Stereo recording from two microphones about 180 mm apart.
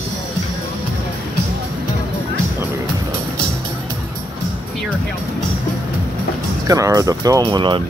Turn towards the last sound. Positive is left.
turn(degrees=-25)  # may be behind; listen again after turning